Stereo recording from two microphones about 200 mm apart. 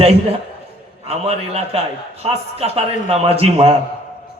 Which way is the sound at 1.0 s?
30° right (ahead or behind).